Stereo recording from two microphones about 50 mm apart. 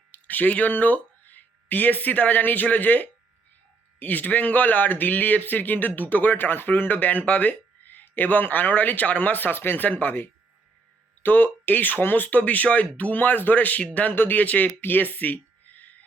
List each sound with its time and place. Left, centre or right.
0.1 s speech: left